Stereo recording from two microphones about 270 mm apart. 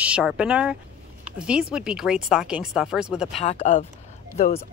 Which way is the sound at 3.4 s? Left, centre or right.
Left.